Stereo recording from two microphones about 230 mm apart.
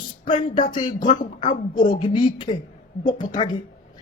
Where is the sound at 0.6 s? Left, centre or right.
Left.